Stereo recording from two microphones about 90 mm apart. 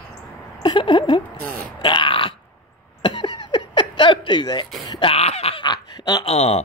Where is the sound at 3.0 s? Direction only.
60° left (ahead or behind).